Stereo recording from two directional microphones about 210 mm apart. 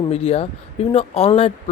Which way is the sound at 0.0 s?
30° left (ahead or behind).